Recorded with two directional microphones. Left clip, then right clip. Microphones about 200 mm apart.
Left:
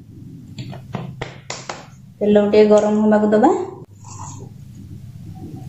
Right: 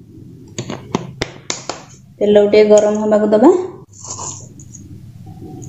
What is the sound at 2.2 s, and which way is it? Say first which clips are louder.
A woman's voice: right 3 dB; 25° right (ahead or behind).